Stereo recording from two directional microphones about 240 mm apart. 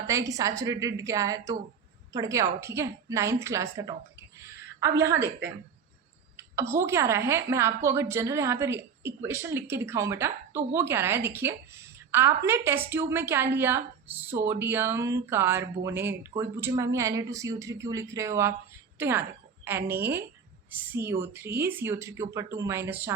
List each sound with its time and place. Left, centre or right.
0.1 s a woman's voice: centre